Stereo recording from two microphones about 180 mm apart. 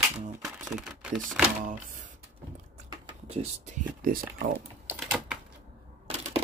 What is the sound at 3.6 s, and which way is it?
Speech, 50° right (ahead or behind).